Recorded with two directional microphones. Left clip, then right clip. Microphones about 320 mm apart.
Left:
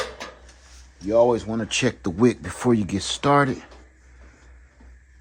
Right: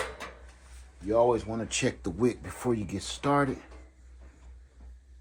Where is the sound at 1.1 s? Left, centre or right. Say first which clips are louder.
Left 6 dB; left.